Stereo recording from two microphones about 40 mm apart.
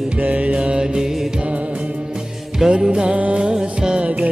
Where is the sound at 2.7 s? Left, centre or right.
Right.